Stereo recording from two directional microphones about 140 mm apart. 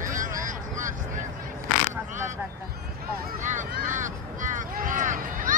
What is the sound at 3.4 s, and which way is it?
Vehicle, 65° right (ahead or behind).